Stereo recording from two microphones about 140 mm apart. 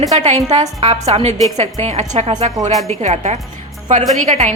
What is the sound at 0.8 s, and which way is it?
A woman's voice, 40° right (ahead or behind).